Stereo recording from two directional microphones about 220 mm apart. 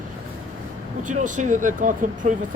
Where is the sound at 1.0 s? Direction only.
35° right (ahead or behind).